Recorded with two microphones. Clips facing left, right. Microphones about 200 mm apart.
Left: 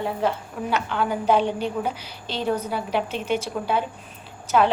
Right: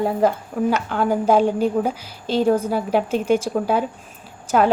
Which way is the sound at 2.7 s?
45° right (ahead or behind).